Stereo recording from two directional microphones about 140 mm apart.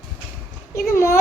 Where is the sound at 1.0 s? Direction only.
20° left (ahead or behind).